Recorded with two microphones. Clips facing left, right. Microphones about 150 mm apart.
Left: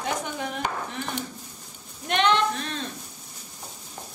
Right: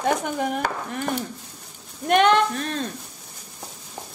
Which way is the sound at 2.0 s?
50° right (ahead or behind).